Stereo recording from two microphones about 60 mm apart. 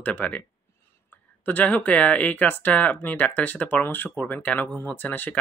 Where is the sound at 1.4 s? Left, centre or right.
Left.